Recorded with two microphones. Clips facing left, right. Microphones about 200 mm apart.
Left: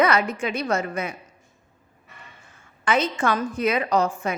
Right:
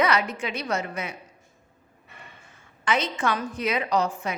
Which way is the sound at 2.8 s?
50° left (ahead or behind).